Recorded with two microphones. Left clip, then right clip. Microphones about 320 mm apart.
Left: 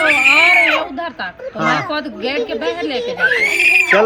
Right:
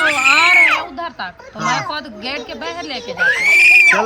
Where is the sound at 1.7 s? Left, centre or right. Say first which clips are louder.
Left 1 dB; right.